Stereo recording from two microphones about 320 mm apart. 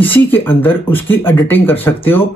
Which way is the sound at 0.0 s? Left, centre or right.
Centre.